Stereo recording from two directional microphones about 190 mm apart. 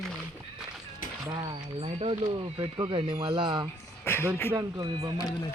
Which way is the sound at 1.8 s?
30° right (ahead or behind).